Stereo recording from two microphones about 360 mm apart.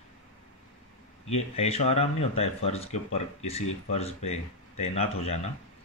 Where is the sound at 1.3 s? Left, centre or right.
Centre.